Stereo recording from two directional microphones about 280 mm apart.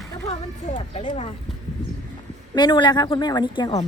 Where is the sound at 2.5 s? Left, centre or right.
Centre.